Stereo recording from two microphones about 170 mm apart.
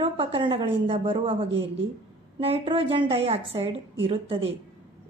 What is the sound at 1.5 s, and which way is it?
Speech, 90° right.